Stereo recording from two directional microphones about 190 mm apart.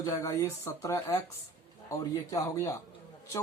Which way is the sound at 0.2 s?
15° left (ahead or behind).